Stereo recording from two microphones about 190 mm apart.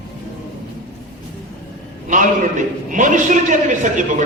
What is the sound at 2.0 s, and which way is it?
A man's voice, 40° right (ahead or behind).